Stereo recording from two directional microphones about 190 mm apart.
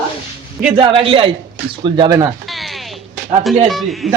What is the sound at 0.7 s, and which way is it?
Speech, 25° right (ahead or behind).